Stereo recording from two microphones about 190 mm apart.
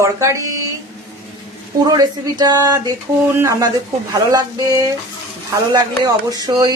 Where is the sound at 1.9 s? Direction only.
20° right (ahead or behind).